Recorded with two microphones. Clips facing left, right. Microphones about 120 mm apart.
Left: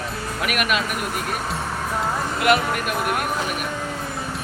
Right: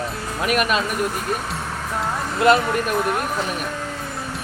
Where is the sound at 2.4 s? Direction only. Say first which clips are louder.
Right 4 dB; 30° right (ahead or behind).